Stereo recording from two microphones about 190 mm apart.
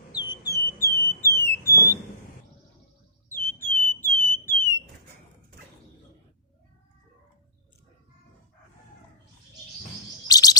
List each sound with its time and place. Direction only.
0.3 s a sound: 15° left (ahead or behind)
3.4 s alarm: 10° left (ahead or behind)
10.2 s chirp: 20° left (ahead or behind)